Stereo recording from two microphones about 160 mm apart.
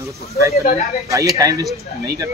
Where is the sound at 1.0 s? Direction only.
20° right (ahead or behind).